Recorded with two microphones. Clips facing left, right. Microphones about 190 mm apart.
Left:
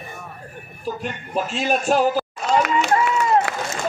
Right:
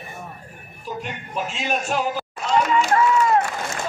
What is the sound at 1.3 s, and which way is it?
Speech, 35° left (ahead or behind).